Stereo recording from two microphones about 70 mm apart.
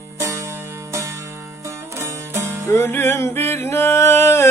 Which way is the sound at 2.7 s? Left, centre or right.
Left.